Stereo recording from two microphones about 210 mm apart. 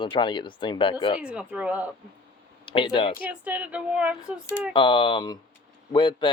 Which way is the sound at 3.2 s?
5° right (ahead or behind).